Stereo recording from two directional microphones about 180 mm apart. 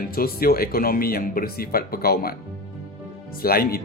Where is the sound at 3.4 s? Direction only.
55° left (ahead or behind).